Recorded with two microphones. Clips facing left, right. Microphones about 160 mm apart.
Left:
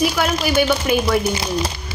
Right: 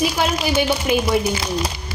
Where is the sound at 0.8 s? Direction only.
20° right (ahead or behind).